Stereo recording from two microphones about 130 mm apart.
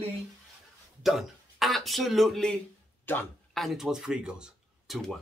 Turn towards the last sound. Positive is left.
turn(degrees=-5)  # may be behind; listen again after turning